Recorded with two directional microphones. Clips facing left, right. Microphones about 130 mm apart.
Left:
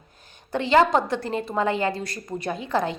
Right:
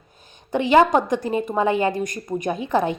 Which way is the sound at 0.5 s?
15° right (ahead or behind).